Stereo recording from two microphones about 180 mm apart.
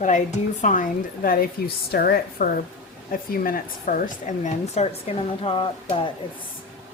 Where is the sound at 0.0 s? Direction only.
45° left (ahead or behind).